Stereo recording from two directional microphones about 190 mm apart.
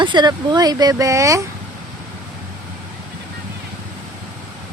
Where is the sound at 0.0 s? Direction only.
25° right (ahead or behind).